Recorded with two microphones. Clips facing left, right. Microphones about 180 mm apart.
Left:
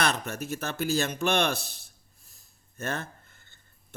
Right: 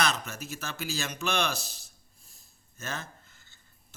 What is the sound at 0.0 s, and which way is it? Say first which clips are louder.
Speech: left 2 dB; 55° left (ahead or behind).